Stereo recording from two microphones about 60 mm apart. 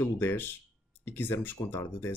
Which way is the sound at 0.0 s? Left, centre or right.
Left.